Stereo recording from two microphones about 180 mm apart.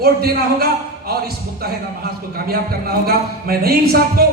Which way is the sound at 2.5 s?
60° right (ahead or behind).